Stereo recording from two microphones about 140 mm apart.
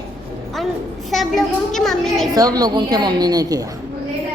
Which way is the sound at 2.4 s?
25° right (ahead or behind).